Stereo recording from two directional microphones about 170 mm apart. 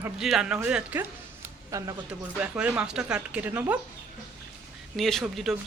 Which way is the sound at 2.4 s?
5° right (ahead or behind).